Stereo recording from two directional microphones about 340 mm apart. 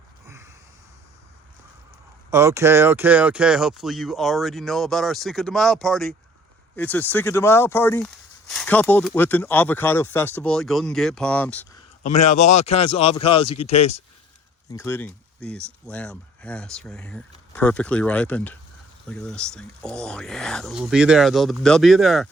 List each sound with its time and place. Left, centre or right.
2.3 s speech: centre
12.2 s speech: left
14.7 s speech: centre